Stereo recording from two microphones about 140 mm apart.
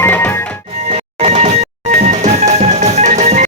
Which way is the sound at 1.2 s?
55° right (ahead or behind).